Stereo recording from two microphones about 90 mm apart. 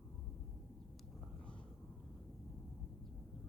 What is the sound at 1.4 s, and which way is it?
Vehicle, 10° left (ahead or behind).